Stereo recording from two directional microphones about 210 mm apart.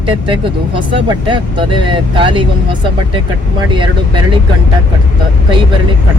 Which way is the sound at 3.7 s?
20° right (ahead or behind).